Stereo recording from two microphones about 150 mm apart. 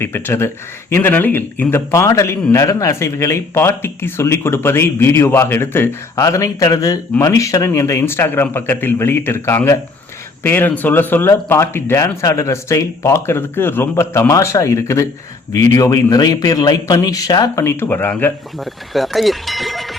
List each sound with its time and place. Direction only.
0.0 s speech: 15° left (ahead or behind)
18.6 s speech: centre (ahead or behind)